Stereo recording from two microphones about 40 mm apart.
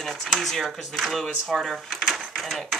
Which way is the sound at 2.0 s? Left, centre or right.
Centre.